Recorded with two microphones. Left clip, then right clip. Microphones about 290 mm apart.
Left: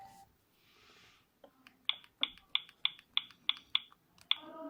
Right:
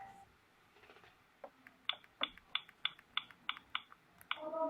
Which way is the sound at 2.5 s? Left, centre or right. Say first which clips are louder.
Left 5 dB; centre.